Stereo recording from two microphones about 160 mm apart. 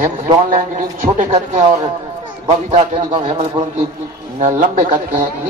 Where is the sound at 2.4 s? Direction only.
35° right (ahead or behind).